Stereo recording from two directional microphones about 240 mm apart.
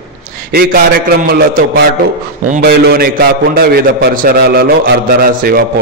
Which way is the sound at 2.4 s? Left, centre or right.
Right.